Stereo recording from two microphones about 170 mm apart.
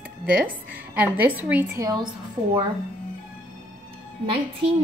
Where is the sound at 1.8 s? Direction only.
25° right (ahead or behind).